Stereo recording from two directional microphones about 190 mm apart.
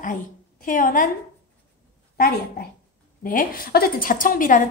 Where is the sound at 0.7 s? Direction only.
45° left (ahead or behind).